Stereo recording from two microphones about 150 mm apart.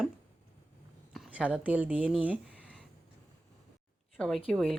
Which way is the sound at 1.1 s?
5° right (ahead or behind).